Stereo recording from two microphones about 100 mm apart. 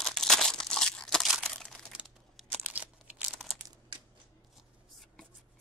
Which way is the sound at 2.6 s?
15° right (ahead or behind).